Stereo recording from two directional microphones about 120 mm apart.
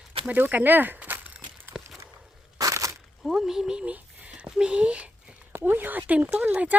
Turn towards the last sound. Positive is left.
turn(degrees=-10)  # may be behind; listen again after turning